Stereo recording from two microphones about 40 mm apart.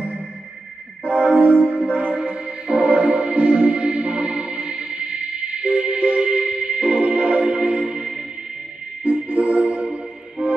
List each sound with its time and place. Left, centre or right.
1.0 s music: right
7.8 s music: centre
9.0 s music: right